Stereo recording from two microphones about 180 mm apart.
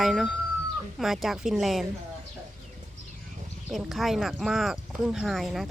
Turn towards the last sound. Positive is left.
turn(degrees=0)  # may be behind; listen again after turning